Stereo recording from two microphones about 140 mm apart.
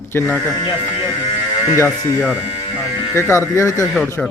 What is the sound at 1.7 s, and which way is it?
Speech, 20° left (ahead or behind).